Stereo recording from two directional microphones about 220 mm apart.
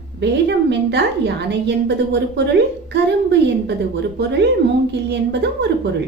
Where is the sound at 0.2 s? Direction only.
50° right (ahead or behind).